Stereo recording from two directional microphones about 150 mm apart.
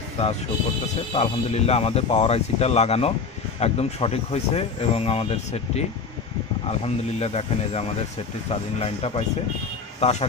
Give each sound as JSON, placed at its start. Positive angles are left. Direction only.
{"t": 1.1, "sound": "speech", "side_deg": 45}